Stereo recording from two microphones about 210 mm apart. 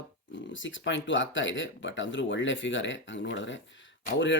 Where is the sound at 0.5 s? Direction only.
65° left (ahead or behind).